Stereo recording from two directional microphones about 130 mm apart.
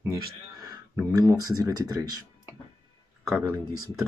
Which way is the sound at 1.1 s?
30° right (ahead or behind).